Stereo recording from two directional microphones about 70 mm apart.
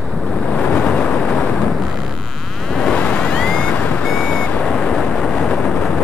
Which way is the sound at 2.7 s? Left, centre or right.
Centre.